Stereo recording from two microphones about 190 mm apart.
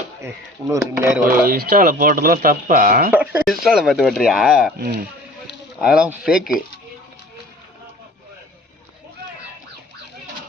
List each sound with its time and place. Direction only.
0.7 s speech: 15° right (ahead or behind)
1.5 s speech: 50° right (ahead or behind)
3.1 s speech: 10° right (ahead or behind)
4.8 s speech: 50° right (ahead or behind)
5.8 s speech: 5° right (ahead or behind)